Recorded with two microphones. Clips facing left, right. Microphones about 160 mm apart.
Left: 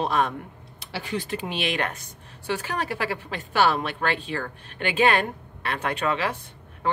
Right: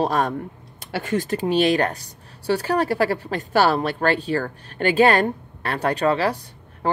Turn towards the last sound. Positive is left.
turn(degrees=-40)  # may be behind; listen again after turning